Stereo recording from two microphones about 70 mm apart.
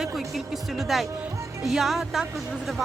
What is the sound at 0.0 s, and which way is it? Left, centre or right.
Music, centre.